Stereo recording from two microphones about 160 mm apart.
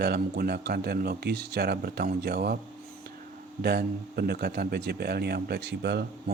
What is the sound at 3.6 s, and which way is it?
A man's voice, 80° right.